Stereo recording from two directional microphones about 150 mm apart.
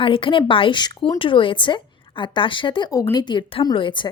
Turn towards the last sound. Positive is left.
turn(degrees=35)  # may be behind; listen again after turning